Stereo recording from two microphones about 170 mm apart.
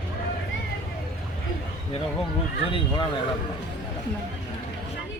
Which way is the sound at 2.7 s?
30° left (ahead or behind).